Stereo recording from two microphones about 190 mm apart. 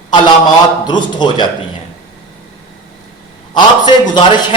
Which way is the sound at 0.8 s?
25° left (ahead or behind).